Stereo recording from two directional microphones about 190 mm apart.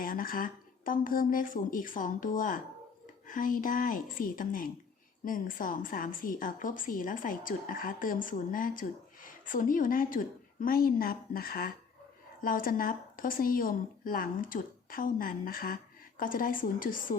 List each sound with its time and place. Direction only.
0.0 s a woman's voice: 50° left (ahead or behind)